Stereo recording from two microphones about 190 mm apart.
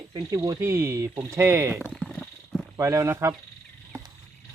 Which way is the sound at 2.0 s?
5° left (ahead or behind).